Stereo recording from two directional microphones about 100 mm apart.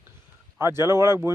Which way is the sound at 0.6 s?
25° right (ahead or behind).